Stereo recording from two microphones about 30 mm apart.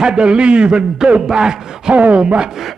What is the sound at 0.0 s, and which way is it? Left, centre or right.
A man's voice, right.